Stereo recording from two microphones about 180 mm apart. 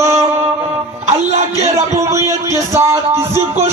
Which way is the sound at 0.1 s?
35° right (ahead or behind).